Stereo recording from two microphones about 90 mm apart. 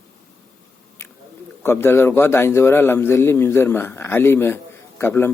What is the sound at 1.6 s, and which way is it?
A man's voice, 25° left (ahead or behind).